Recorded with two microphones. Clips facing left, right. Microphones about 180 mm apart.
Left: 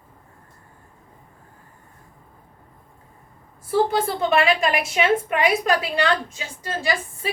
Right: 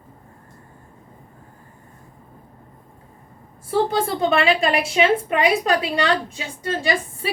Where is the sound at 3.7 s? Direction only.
30° right (ahead or behind).